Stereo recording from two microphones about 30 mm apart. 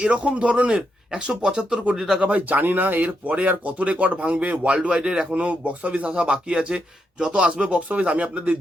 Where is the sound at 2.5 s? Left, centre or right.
Right.